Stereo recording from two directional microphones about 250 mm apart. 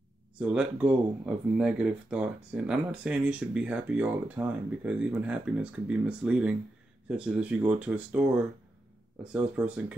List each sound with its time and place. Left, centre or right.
0.4 s speech: centre
9.6 s speech: centre